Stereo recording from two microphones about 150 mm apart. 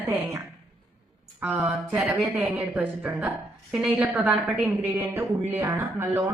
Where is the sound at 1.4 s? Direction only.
10° right (ahead or behind).